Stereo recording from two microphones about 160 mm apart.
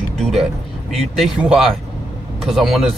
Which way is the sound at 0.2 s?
Centre (ahead or behind).